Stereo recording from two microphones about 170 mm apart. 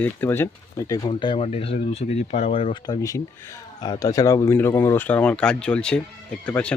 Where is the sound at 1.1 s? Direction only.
30° left (ahead or behind); by 6.7 s 10° left (ahead or behind).